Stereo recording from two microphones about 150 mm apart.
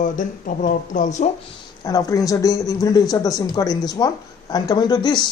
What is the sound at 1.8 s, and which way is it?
Speech, 25° left (ahead or behind).